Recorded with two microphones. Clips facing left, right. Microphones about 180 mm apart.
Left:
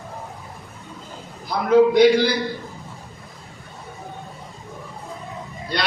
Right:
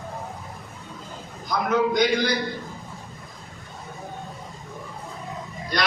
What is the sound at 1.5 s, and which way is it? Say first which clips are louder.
Speech: left 7 dB; 30° left (ahead or behind).